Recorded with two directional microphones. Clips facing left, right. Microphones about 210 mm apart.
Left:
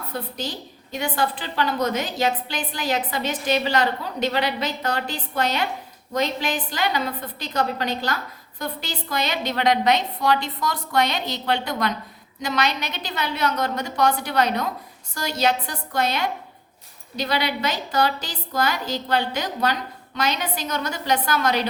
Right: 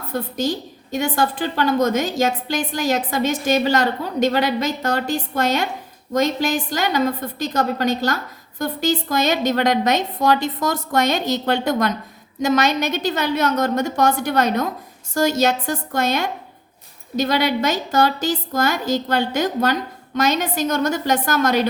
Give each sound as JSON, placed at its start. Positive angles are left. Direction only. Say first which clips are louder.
{"t": 0.1, "sound": "a woman's voice", "louder": "right 9 dB", "side_deg": -45}